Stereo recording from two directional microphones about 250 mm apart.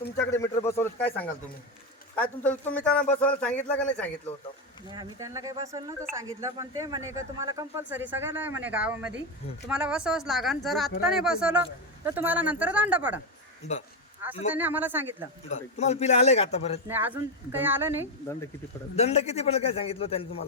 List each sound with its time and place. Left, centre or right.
0.2 s speech: centre
4.9 s speech: centre
13.6 s a man's voice: left
14.5 s speech: centre
15.4 s a man's voice: left
16.9 s speech: centre
18.9 s a man's voice: left